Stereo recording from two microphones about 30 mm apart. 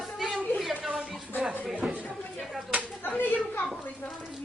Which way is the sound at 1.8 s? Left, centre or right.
Right.